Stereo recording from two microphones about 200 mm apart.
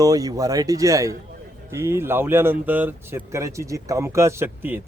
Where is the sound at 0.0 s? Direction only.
20° right (ahead or behind).